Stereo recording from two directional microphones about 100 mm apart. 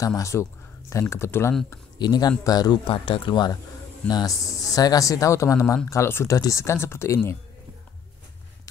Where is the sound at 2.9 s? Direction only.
55° left (ahead or behind).